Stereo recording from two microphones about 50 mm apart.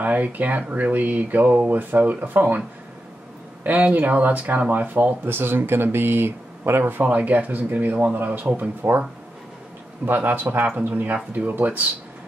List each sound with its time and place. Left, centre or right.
0.0 s speech: right
3.6 s speech: right
7.1 s speech: right
10.0 s speech: right